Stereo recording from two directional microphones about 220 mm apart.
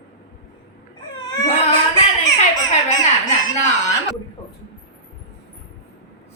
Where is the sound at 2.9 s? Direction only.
35° left (ahead or behind).